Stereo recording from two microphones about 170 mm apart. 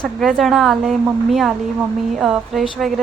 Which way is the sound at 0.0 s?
Centre (ahead or behind).